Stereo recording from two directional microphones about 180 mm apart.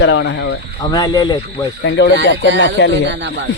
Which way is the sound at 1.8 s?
90° left.